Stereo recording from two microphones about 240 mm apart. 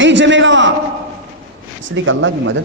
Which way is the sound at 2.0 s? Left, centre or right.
Right.